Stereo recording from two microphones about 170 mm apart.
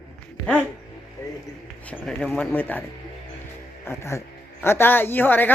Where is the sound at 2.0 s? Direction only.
5° left (ahead or behind).